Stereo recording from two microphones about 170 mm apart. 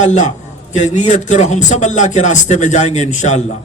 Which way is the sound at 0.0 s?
45° left (ahead or behind).